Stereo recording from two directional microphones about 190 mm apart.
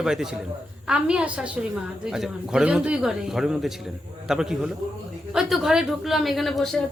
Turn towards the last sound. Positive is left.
turn(degrees=0)  # may be behind; listen again after turning